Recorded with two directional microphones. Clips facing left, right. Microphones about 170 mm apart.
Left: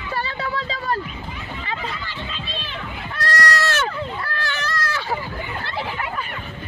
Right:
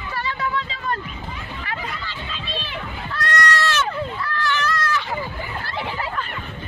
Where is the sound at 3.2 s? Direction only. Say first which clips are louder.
Even; 35° left (ahead or behind).